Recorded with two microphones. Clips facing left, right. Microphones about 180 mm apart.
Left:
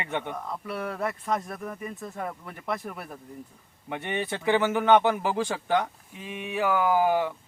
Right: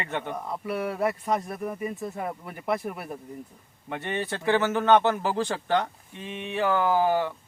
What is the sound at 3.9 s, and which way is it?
Speech, 15° left (ahead or behind).